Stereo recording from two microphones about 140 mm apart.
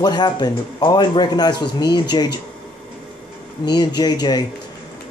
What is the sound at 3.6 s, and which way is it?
Speech, 30° left (ahead or behind).